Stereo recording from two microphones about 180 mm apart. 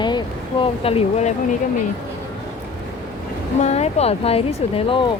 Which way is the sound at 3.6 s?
35° left (ahead or behind).